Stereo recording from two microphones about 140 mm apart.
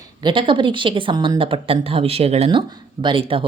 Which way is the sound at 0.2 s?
35° right (ahead or behind).